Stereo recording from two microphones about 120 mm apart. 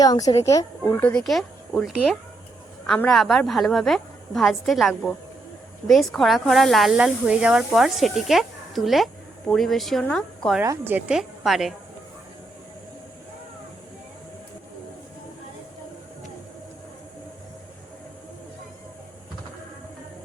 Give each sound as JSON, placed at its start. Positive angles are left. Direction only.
{"t": 0.0, "sound": "speech", "side_deg": 30}
{"t": 0.9, "sound": "speech", "side_deg": 15}
{"t": 1.2, "sound": "a woman's voice", "side_deg": 0}
{"t": 10.6, "sound": "a woman's voice", "side_deg": -20}
{"t": 11.1, "sound": "a woman's voice", "side_deg": -5}